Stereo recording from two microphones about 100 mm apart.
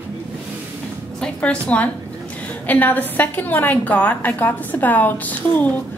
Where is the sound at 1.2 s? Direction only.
10° left (ahead or behind).